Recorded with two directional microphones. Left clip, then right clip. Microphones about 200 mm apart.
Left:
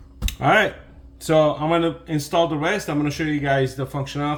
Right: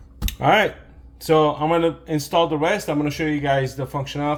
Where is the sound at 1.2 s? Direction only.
10° right (ahead or behind).